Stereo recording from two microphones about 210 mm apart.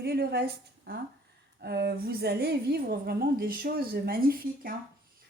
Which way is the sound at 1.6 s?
50° right (ahead or behind).